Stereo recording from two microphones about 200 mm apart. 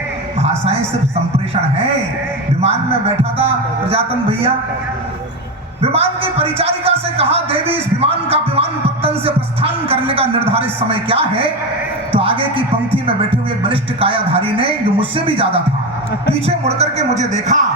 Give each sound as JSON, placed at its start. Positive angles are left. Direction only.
{"t": 0.4, "sound": "speech", "side_deg": -30}
{"t": 3.3, "sound": "music", "side_deg": -30}
{"t": 5.8, "sound": "music", "side_deg": -30}
{"t": 9.9, "sound": "music", "side_deg": -30}